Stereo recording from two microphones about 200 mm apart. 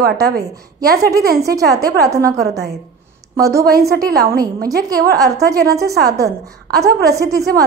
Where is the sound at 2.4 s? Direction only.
55° right (ahead or behind).